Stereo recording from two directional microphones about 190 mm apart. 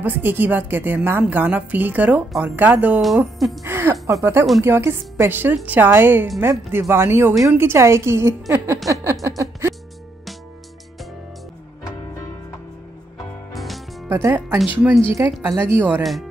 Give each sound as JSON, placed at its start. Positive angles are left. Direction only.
{"t": 0.0, "sound": "a woman's voice", "side_deg": -10}
{"t": 3.6, "sound": "music", "side_deg": -10}
{"t": 4.1, "sound": "a woman's voice", "side_deg": -15}
{"t": 9.4, "sound": "music", "side_deg": -15}
{"t": 13.5, "sound": "music", "side_deg": 0}
{"t": 14.0, "sound": "a woman's voice", "side_deg": -15}